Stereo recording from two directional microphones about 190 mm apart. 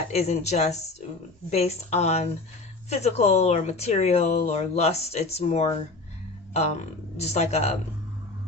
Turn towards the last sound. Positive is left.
turn(degrees=35)  # may be behind; listen again after turning